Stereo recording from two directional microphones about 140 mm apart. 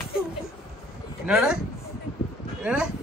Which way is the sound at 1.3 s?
5° right (ahead or behind).